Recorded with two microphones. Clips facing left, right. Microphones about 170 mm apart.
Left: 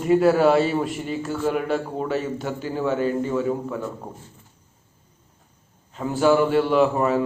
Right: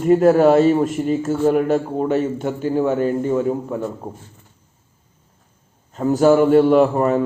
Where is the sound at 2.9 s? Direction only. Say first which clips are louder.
Even; 50° right (ahead or behind).